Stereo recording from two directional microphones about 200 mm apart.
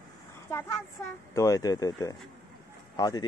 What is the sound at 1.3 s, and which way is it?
Speech, 15° left (ahead or behind).